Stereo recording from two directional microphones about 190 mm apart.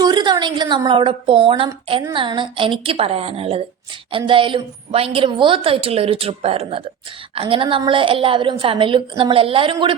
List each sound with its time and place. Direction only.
0.0 s a woman's voice: 25° right (ahead or behind)